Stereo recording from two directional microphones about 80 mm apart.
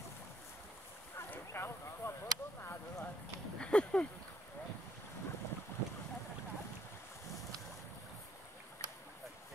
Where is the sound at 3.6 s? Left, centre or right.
Centre.